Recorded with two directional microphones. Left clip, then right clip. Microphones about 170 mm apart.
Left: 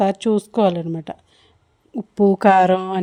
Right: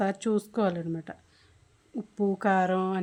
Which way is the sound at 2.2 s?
40° left (ahead or behind).